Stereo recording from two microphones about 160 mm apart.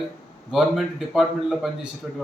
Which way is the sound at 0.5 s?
Centre (ahead or behind).